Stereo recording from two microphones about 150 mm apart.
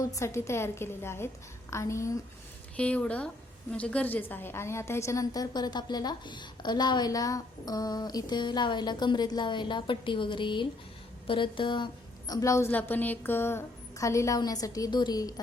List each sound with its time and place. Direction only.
0.0 s a woman's voice: 20° left (ahead or behind)
2.7 s a woman's voice: 10° left (ahead or behind); by 11.9 s 30° left (ahead or behind)
12.3 s a woman's voice: 20° left (ahead or behind)